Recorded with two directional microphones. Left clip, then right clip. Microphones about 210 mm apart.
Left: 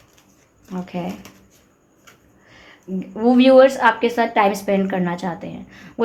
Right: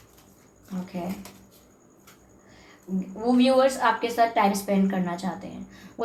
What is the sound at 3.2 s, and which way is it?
A woman's voice, 45° left (ahead or behind).